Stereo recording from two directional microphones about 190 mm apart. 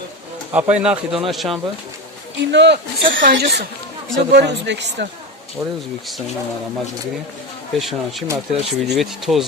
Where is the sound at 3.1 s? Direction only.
50° right (ahead or behind).